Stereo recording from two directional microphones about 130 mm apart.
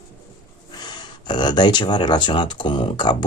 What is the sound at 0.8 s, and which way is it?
Speech, 35° left (ahead or behind).